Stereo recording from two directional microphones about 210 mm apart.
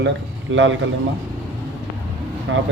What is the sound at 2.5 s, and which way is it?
Speech, 65° right (ahead or behind).